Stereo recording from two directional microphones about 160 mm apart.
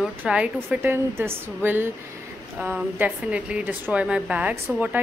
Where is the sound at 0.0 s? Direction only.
5° right (ahead or behind).